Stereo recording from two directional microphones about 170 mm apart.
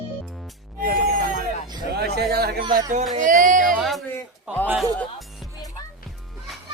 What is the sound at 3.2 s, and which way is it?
Speech, 50° right (ahead or behind).